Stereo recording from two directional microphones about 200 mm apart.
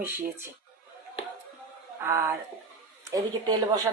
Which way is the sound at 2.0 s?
15° right (ahead or behind).